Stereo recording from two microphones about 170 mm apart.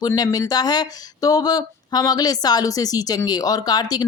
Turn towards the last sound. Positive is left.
turn(degrees=25)  # may be behind; listen again after turning